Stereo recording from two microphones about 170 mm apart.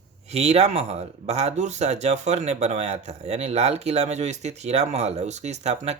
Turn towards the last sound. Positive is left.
turn(degrees=-40)  # may be behind; listen again after turning